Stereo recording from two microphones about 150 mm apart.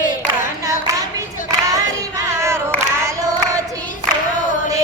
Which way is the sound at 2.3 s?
20° right (ahead or behind).